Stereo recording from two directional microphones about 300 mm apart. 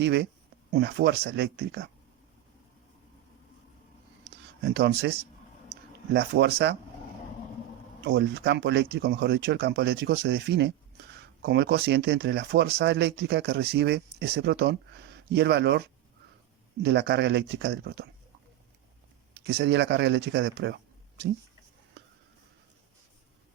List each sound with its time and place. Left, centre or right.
0.0 s speech: right
4.6 s speech: right
6.1 s speech: right
8.0 s speech: right
16.8 s speech: right
19.3 s speech: right